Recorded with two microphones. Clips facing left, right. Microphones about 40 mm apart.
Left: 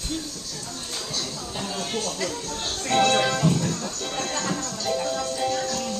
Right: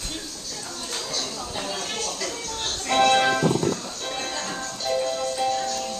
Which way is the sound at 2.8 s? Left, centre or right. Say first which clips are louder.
Right 2 dB; right.